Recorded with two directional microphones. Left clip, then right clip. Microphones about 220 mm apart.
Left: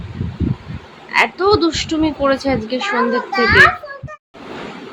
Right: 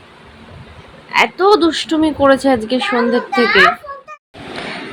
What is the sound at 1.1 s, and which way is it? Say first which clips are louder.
Speech: right 2 dB; 5° right (ahead or behind).